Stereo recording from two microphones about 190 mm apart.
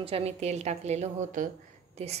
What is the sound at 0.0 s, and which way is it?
A woman's voice, 30° right (ahead or behind).